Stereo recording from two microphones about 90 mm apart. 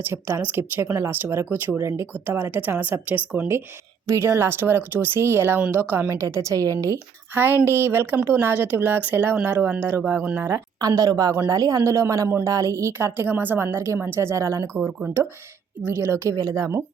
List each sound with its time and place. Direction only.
0.1 s speech: 25° right (ahead or behind)
5.5 s a woman's voice: 15° right (ahead or behind)
6.2 s speech: 35° right (ahead or behind)
7.3 s speech: 25° right (ahead or behind)
10.8 s a woman's voice: 45° right (ahead or behind)
16.0 s speech: 30° right (ahead or behind)